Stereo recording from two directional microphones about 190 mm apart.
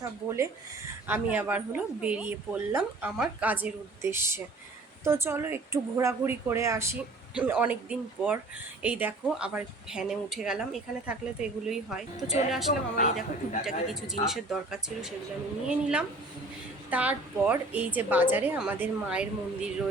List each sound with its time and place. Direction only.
0.0 s a woman's voice: 15° right (ahead or behind)
12.1 s a man's voice: 35° left (ahead or behind)
13.9 s a woman's voice: centre (ahead or behind)